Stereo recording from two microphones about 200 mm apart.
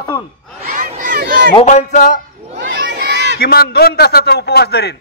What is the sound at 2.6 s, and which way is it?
Crowd, 60° right (ahead or behind).